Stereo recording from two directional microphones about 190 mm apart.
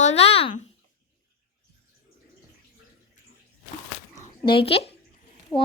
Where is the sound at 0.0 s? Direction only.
35° left (ahead or behind).